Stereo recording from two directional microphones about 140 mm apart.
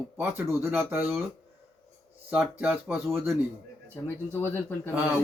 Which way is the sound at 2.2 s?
10° right (ahead or behind).